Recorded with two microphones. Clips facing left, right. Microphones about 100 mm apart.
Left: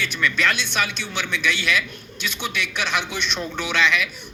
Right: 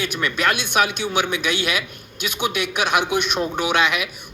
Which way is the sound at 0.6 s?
55° right (ahead or behind).